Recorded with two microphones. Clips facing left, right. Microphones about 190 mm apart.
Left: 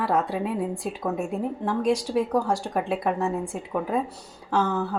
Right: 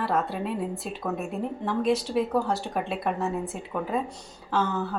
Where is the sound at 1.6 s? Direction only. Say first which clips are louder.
Even; 10° left (ahead or behind).